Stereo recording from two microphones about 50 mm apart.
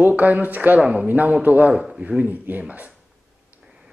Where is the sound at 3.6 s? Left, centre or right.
Centre.